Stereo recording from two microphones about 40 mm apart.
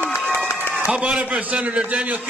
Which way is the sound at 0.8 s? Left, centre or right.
Right.